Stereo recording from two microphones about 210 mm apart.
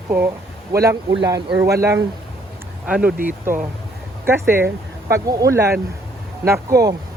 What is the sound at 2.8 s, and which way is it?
Speech, 5° right (ahead or behind).